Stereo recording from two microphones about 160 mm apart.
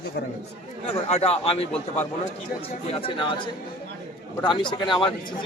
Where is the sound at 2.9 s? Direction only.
35° left (ahead or behind).